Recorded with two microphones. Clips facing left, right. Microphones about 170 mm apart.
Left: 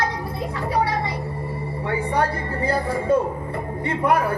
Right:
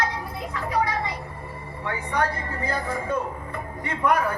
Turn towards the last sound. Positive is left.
turn(degrees=30)  # may be behind; listen again after turning